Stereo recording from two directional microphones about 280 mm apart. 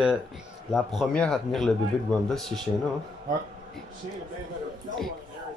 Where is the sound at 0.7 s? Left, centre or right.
Centre.